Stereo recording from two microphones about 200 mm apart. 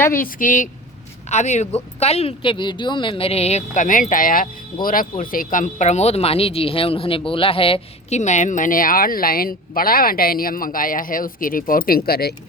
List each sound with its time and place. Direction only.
0.1 s a woman's voice: 45° left (ahead or behind)